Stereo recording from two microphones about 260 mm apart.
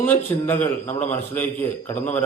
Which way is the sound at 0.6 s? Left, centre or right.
Left.